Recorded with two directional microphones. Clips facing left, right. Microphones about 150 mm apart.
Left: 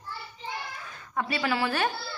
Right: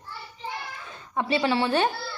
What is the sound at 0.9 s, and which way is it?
Speech, 20° right (ahead or behind).